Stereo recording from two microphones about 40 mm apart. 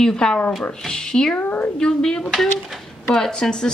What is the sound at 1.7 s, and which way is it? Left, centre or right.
Speech, centre.